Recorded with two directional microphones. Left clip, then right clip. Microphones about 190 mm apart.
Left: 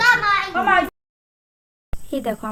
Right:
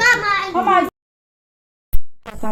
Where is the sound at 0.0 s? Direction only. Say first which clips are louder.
Right 1 dB; 35° left (ahead or behind).